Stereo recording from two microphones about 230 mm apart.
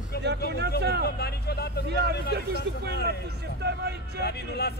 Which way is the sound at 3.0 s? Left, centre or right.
Right.